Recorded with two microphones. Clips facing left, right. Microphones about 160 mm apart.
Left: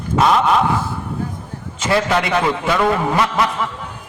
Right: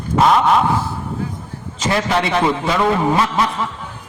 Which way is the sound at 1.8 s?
30° right (ahead or behind).